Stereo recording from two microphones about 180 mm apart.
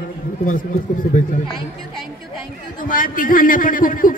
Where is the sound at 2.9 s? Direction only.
50° left (ahead or behind).